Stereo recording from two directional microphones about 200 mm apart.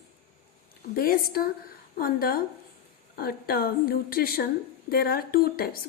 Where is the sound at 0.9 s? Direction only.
50° left (ahead or behind).